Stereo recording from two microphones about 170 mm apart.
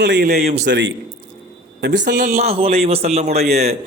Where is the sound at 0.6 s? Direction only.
90° right.